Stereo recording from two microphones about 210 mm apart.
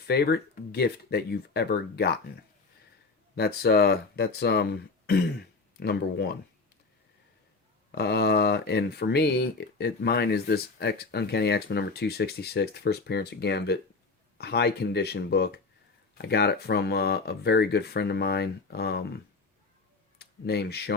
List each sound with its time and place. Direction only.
0.0 s speech: 50° left (ahead or behind)
3.3 s speech: 50° left (ahead or behind)
7.9 s speech: 50° left (ahead or behind)